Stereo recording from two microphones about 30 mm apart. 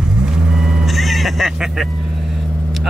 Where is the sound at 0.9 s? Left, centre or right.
Centre.